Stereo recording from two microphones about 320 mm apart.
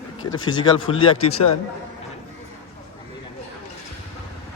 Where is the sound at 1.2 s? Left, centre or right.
Left.